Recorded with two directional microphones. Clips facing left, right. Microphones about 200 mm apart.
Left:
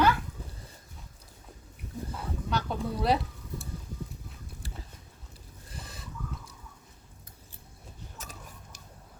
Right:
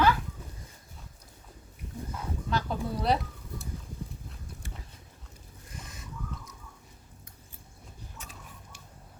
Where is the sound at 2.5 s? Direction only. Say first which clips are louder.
Even; centre (ahead or behind).